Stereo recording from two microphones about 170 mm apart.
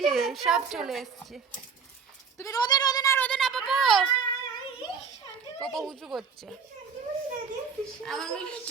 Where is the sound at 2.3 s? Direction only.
20° left (ahead or behind).